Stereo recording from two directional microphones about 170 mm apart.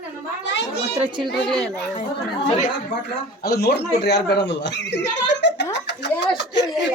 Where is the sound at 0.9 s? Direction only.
30° right (ahead or behind).